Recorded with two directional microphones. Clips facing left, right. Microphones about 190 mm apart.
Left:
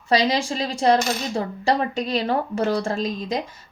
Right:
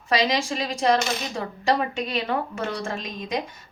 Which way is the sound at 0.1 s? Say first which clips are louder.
Left 3 dB; 30° left (ahead or behind).